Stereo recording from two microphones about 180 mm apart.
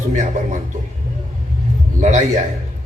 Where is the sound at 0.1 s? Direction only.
45° right (ahead or behind).